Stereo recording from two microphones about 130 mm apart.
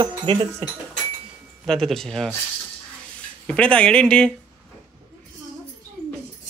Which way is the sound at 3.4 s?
10° left (ahead or behind).